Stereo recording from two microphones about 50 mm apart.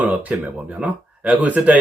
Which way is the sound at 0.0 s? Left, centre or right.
Right.